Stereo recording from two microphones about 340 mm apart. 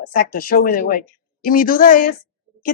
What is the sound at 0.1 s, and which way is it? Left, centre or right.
Speech, left.